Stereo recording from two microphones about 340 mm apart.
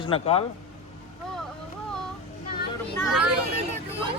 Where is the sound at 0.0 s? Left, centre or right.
Centre.